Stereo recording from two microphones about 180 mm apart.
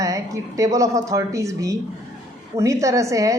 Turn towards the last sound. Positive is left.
turn(degrees=-15)  # may be behind; listen again after turning